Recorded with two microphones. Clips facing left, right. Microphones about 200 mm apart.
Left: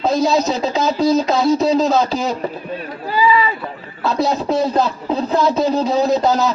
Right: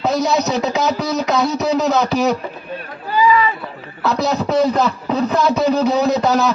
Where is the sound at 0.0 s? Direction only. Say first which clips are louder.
Left 1 dB; 70° right (ahead or behind).